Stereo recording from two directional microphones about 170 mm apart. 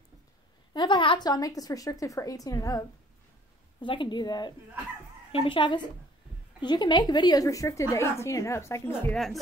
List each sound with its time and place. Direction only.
0.7 s a woman's voice: 30° left (ahead or behind)
3.8 s a woman's voice: 30° left (ahead or behind)
9.1 s speech: centre (ahead or behind)